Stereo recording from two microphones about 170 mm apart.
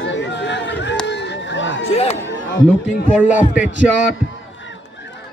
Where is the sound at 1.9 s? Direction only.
35° left (ahead or behind).